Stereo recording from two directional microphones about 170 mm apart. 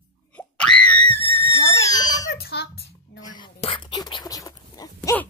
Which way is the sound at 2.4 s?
65° left (ahead or behind).